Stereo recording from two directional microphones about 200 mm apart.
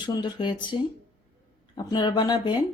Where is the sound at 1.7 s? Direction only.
20° left (ahead or behind).